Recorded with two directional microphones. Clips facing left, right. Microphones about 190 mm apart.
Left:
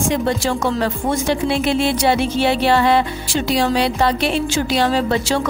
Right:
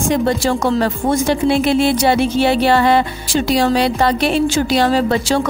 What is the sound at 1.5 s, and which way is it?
Speech, 45° right (ahead or behind).